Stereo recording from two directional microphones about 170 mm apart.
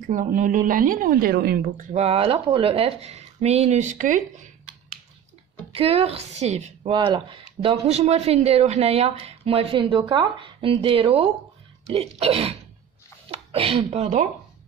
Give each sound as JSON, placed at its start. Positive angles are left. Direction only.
{"t": 0.0, "sound": "a woman's voice", "side_deg": -50}
{"t": 1.9, "sound": "speech", "side_deg": -40}
{"t": 5.7, "sound": "speech", "side_deg": -35}
{"t": 6.9, "sound": "speech", "side_deg": -30}